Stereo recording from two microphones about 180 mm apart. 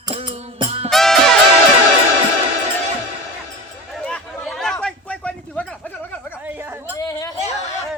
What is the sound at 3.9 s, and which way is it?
Chatter, 5° left (ahead or behind).